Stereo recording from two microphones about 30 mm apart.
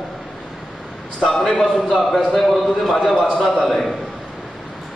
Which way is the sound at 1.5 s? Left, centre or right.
Centre.